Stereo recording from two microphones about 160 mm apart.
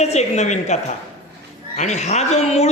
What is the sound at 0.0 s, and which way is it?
A man's voice, 45° left (ahead or behind).